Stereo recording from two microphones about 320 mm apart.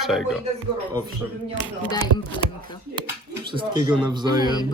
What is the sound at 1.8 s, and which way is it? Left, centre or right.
Speech, centre.